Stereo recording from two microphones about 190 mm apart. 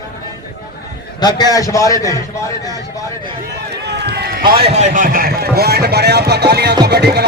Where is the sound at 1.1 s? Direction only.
20° left (ahead or behind).